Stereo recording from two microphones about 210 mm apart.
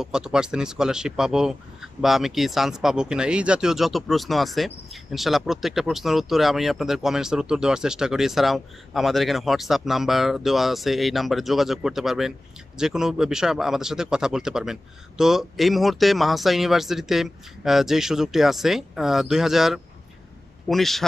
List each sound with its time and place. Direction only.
0.0 s speech: 5° right (ahead or behind)